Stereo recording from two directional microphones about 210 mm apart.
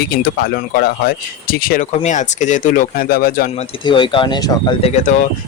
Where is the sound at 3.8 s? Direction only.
25° left (ahead or behind).